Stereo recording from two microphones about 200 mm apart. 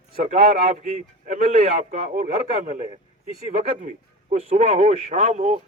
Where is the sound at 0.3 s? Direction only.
35° right (ahead or behind).